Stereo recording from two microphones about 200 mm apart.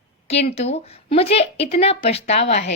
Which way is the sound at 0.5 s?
30° left (ahead or behind).